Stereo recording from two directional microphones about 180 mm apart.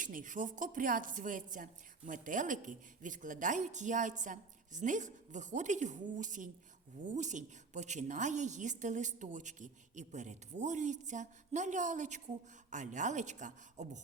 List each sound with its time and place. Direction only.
0.0 s a woman's voice: 45° right (ahead or behind)